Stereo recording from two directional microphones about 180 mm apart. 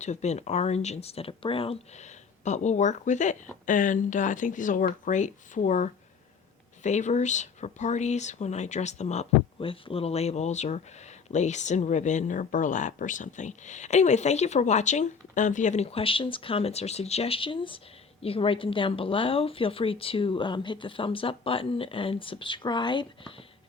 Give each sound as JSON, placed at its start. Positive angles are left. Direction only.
{"t": 0.0, "sound": "speech", "side_deg": 40}